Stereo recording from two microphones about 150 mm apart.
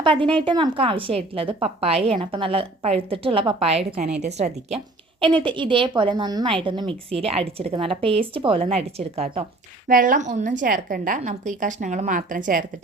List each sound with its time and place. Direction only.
0.0 s a woman's voice: 35° right (ahead or behind)
5.4 s a woman's voice: 35° right (ahead or behind)
9.8 s a woman's voice: 65° right (ahead or behind)